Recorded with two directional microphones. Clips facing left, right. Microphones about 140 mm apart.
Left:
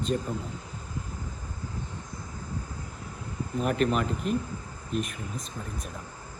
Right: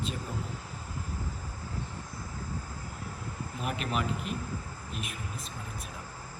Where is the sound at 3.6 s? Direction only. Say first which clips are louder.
Left 7 dB; 40° left (ahead or behind).